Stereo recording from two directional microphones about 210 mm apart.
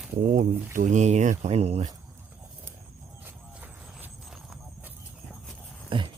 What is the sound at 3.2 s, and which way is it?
Clip-clop, 5° right (ahead or behind).